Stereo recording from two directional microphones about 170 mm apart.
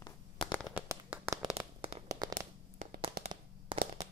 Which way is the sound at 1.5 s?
35° right (ahead or behind).